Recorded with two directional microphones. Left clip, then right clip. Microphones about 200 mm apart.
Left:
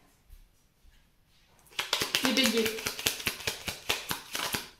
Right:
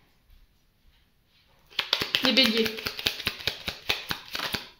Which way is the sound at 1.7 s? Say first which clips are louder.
Right 3 dB; 30° right (ahead or behind).